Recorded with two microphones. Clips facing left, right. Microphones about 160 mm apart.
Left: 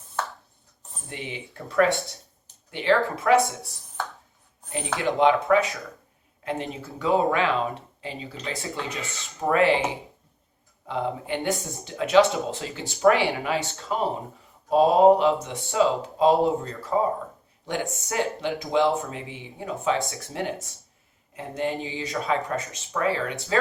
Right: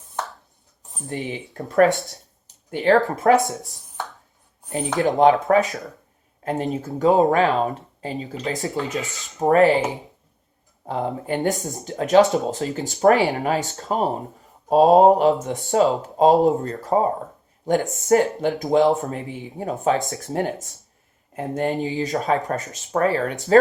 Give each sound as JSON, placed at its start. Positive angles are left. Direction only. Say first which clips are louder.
{"t": 1.1, "sound": "speech", "louder": "right 7 dB", "side_deg": -40}
{"t": 4.9, "sound": "speech", "louder": "right 5 dB", "side_deg": -40}
{"t": 10.8, "sound": "speech", "louder": "right 3 dB", "side_deg": -45}
{"t": 18.1, "sound": "speech", "louder": "right 10 dB", "side_deg": -45}